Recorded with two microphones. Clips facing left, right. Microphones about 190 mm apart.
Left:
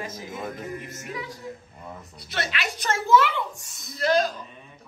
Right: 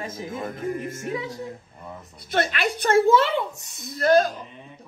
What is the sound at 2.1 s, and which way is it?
A woman's voice, 50° right (ahead or behind).